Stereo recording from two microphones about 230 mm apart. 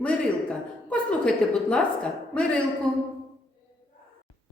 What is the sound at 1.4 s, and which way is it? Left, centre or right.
Speech, centre.